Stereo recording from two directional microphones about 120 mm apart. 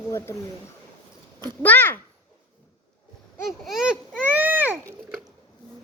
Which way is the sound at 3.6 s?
5° right (ahead or behind).